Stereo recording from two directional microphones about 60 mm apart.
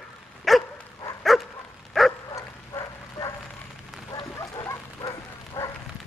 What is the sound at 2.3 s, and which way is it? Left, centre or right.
Bow-wow, left.